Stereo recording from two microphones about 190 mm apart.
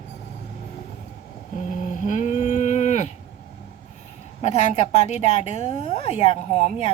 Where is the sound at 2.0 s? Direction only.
40° left (ahead or behind).